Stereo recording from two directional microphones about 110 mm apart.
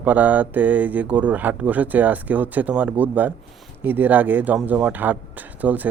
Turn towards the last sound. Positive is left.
turn(degrees=-15)  # may be behind; listen again after turning